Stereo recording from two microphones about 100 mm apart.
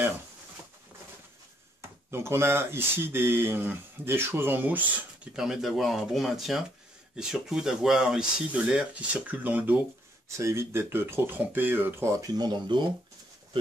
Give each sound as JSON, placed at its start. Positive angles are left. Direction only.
{"t": 2.0, "sound": "speech", "side_deg": -25}
{"t": 5.3, "sound": "speech", "side_deg": -5}
{"t": 10.2, "sound": "speech", "side_deg": -30}
{"t": 12.4, "sound": "speech", "side_deg": -50}